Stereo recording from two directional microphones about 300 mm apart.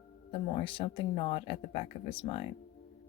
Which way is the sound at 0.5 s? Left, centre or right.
Centre.